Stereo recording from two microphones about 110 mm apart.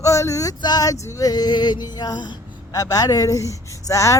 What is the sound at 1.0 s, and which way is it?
Speech, 30° left (ahead or behind).